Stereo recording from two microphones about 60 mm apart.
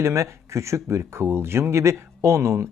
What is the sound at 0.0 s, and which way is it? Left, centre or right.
Speech, right.